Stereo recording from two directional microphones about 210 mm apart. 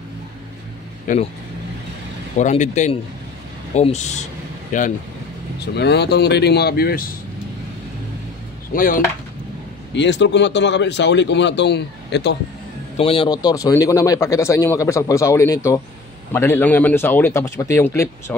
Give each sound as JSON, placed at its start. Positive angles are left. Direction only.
{"t": 1.1, "sound": "speech", "side_deg": 40}
{"t": 2.3, "sound": "speech", "side_deg": 35}
{"t": 5.8, "sound": "speech", "side_deg": 50}
{"t": 8.7, "sound": "speech", "side_deg": 40}
{"t": 9.9, "sound": "speech", "side_deg": 55}
{"t": 12.9, "sound": "a man's voice", "side_deg": 25}